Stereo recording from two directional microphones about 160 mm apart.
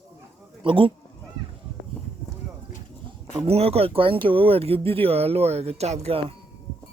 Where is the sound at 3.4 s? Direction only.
40° right (ahead or behind).